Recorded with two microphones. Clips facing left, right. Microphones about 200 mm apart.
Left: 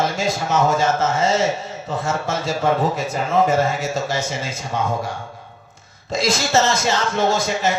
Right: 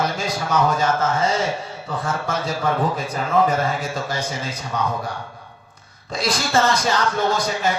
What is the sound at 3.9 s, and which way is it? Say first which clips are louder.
A man's voice: left 3 dB; 25° left (ahead or behind).